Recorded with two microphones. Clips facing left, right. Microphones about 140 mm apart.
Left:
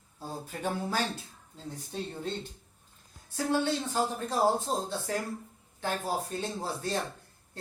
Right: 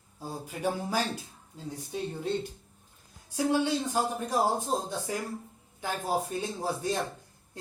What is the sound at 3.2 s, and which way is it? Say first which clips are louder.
Speech: right 2 dB; 15° right (ahead or behind).